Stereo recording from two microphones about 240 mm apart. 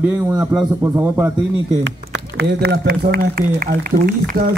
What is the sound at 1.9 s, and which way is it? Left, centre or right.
Speech, right.